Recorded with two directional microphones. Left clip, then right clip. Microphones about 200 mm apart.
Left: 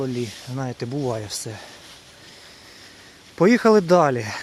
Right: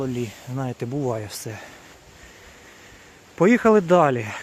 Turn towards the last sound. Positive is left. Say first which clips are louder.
# even
turn(degrees=0)  # may be behind; listen again after turning